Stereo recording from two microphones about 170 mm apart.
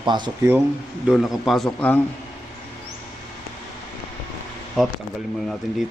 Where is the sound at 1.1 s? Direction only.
Centre (ahead or behind).